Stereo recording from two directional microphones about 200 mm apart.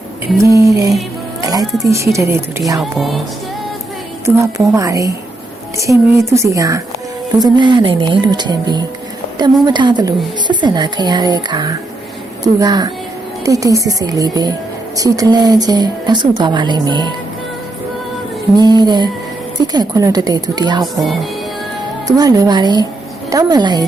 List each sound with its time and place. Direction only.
0.4 s a woman's voice: 15° right (ahead or behind)
3.0 s music: centre (ahead or behind)
4.4 s a woman's voice: 15° right (ahead or behind)
18.5 s a woman's voice: 20° right (ahead or behind)
22.0 s a woman's voice: 20° right (ahead or behind)